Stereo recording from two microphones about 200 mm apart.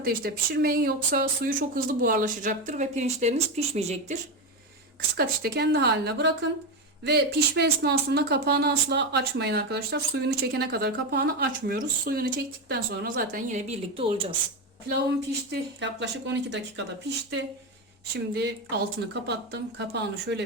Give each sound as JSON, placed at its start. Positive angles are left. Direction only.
{"t": 0.0, "sound": "speech", "side_deg": -50}
{"t": 5.1, "sound": "speech", "side_deg": -50}
{"t": 15.3, "sound": "speech", "side_deg": -60}
{"t": 18.1, "sound": "speech", "side_deg": -55}